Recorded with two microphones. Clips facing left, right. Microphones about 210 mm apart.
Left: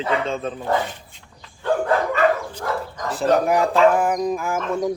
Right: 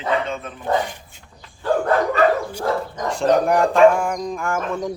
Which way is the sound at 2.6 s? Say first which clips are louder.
Right 4 dB; 30° right (ahead or behind).